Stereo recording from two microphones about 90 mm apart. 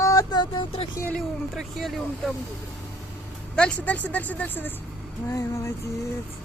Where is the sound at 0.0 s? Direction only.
40° left (ahead or behind).